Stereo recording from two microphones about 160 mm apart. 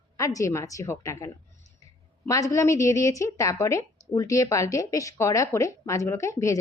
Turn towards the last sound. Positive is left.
turn(degrees=20)  # may be behind; listen again after turning